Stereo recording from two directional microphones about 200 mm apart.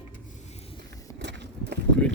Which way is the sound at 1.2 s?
60° right (ahead or behind).